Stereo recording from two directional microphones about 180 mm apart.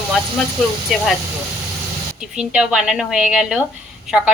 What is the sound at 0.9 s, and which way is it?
Speech, centre (ahead or behind).